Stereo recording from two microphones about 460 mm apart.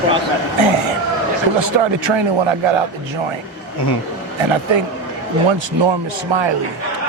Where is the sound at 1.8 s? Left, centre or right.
Right.